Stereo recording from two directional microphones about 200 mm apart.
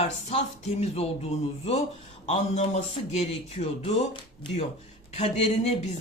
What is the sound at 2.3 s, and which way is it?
Speech, 35° left (ahead or behind).